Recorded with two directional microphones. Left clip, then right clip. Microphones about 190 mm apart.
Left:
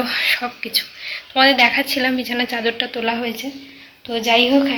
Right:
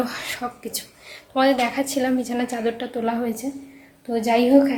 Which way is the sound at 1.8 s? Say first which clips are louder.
Left 4 dB; 15° right (ahead or behind).